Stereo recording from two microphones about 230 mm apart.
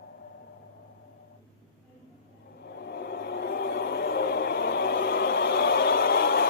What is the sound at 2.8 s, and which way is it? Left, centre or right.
Vehicle, left.